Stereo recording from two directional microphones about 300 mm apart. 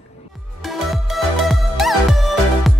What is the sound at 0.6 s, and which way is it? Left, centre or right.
Music, centre.